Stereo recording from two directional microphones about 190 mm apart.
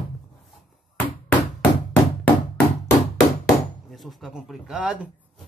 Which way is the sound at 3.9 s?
Centre (ahead or behind).